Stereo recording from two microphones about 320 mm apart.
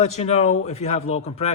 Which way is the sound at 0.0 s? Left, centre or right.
Centre.